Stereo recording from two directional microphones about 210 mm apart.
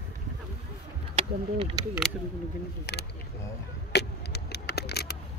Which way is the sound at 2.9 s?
55° left (ahead or behind).